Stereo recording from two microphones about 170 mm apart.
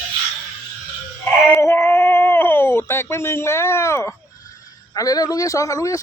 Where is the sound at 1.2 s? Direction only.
15° left (ahead or behind).